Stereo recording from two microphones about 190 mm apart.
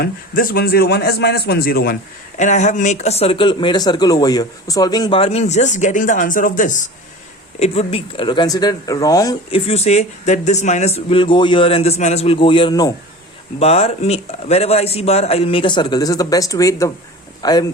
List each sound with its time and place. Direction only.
0.0 s a man's voice: 50° left (ahead or behind)
2.4 s a man's voice: 40° left (ahead or behind)
7.6 s speech: 30° left (ahead or behind)
9.5 s a man's voice: 35° left (ahead or behind)